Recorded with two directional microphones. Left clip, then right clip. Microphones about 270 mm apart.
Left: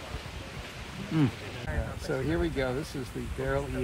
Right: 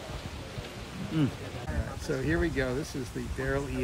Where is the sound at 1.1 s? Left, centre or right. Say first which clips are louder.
Left 2 dB; left.